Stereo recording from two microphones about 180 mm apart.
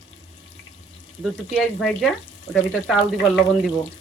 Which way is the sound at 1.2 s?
Centre (ahead or behind).